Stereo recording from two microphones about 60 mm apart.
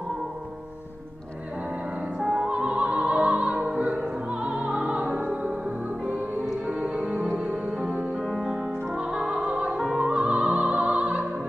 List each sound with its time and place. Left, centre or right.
2.1 s opera: centre
6.7 s music: centre
8.9 s music: centre